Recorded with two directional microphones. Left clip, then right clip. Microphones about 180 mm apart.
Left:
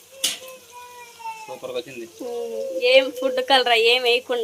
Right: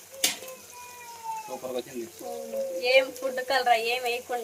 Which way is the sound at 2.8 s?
40° left (ahead or behind).